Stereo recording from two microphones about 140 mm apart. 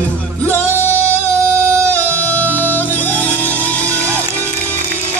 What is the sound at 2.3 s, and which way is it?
Music, 10° left (ahead or behind).